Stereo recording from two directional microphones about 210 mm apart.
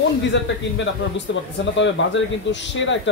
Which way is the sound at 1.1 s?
60° left (ahead or behind).